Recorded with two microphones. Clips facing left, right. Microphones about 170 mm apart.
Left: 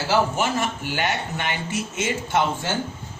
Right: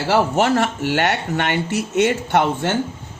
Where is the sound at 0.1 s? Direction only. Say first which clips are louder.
Right 5 dB; 70° right (ahead or behind).